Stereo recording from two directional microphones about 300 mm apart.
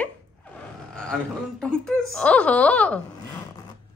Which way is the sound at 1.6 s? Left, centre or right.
Centre.